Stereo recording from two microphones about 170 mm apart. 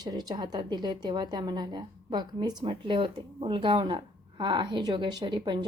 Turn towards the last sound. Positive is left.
turn(degrees=-25)  # may be behind; listen again after turning